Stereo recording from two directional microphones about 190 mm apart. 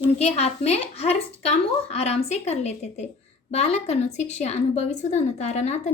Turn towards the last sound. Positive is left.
turn(degrees=35)  # may be behind; listen again after turning